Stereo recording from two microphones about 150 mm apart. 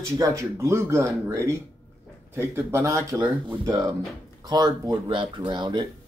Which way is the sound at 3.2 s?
10° right (ahead or behind).